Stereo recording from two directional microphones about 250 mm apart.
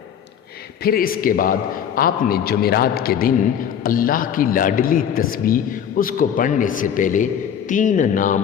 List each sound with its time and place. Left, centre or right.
0.8 s a man's voice: left